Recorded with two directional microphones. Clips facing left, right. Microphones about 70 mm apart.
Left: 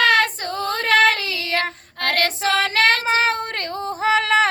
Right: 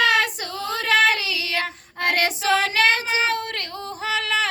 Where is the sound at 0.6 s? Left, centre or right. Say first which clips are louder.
Left 2 dB; left.